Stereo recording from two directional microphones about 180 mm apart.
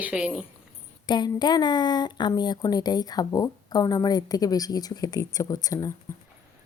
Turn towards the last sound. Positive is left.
turn(degrees=20)  # may be behind; listen again after turning